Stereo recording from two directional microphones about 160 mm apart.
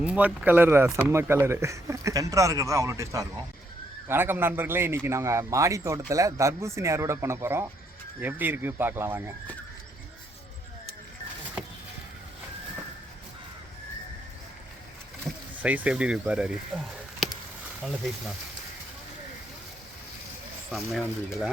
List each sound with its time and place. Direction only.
0.0 s speech: 5° right (ahead or behind)
15.3 s vehicle: centre (ahead or behind)
15.6 s speech: 10° right (ahead or behind)
20.7 s speech: centre (ahead or behind)